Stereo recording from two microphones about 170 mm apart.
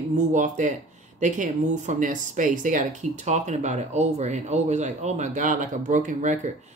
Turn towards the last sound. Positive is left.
turn(degrees=-45)  # may be behind; listen again after turning